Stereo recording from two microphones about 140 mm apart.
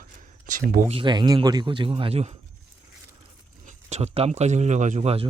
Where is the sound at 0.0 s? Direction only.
70° right (ahead or behind).